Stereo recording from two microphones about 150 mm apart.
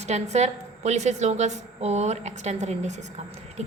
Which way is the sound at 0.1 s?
50° right (ahead or behind).